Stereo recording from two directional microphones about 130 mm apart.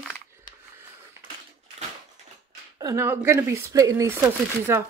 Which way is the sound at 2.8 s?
25° right (ahead or behind).